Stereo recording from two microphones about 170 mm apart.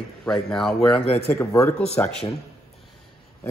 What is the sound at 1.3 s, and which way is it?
Speech, 15° left (ahead or behind).